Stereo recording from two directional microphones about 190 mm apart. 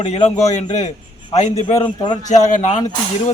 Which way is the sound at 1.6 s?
25° left (ahead or behind).